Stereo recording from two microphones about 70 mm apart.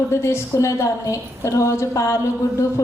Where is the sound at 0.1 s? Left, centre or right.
Left.